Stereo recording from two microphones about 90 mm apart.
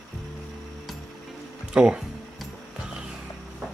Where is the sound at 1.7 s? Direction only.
10° right (ahead or behind).